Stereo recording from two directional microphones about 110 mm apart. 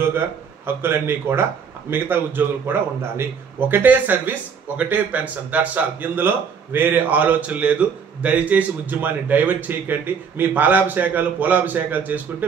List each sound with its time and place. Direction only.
0.7 s a man's voice: 20° right (ahead or behind)